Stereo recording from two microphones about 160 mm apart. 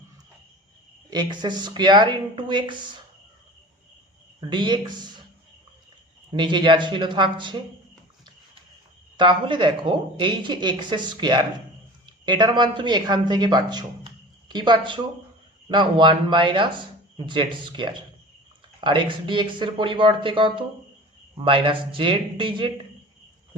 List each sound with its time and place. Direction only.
1.3 s speech: 30° right (ahead or behind)
4.4 s speech: 30° right (ahead or behind)
6.3 s speech: 30° right (ahead or behind)
9.1 s speech: 30° right (ahead or behind)